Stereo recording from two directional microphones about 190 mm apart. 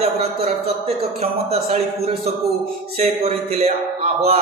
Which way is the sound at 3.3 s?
30° right (ahead or behind).